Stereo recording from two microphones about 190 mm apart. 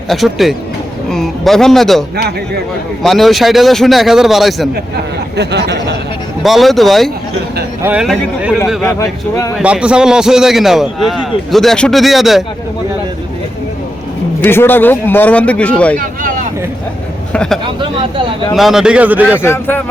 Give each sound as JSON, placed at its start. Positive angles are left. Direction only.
{"t": 0.1, "sound": "a man's voice", "side_deg": 0}
{"t": 5.4, "sound": "speech", "side_deg": -60}
{"t": 6.4, "sound": "a man's voice", "side_deg": 0}
{"t": 7.8, "sound": "a man's voice", "side_deg": -10}
{"t": 8.8, "sound": "a man's voice", "side_deg": 10}
{"t": 9.6, "sound": "a man's voice", "side_deg": -5}
{"t": 14.4, "sound": "a man's voice", "side_deg": 10}
{"t": 16.2, "sound": "a sound", "side_deg": -45}
{"t": 17.3, "sound": "a man's voice", "side_deg": 5}
{"t": 19.4, "sound": "a man's voice", "side_deg": 10}